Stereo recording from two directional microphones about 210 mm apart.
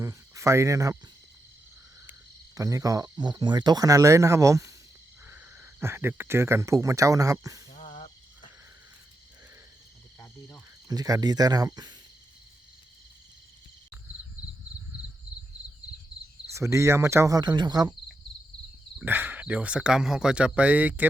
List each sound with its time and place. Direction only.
0.0 s speech: 15° right (ahead or behind)
2.6 s speech: 15° right (ahead or behind)
7.7 s cricket: 30° left (ahead or behind)
10.8 s speech: 15° right (ahead or behind)
16.6 s speech: 15° right (ahead or behind)
18.9 s speech: 10° right (ahead or behind)